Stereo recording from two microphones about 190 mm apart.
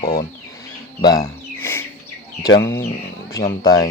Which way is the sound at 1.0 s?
15° left (ahead or behind).